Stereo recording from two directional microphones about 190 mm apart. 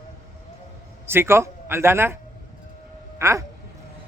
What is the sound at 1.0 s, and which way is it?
A man's voice, 10° right (ahead or behind).